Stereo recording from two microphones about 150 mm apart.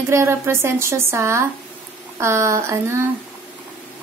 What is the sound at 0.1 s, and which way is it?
A woman's voice, 15° right (ahead or behind).